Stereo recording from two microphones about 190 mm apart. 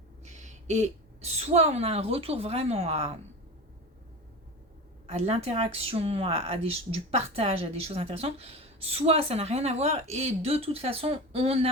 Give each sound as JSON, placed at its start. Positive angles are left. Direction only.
{"t": 0.3, "sound": "a woman's voice", "side_deg": -40}
{"t": 5.0, "sound": "speech", "side_deg": -35}